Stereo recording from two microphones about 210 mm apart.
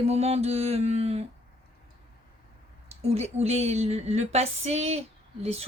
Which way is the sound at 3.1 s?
30° right (ahead or behind).